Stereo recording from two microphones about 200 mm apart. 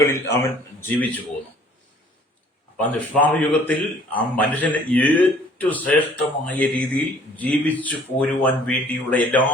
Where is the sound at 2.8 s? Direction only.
5° left (ahead or behind).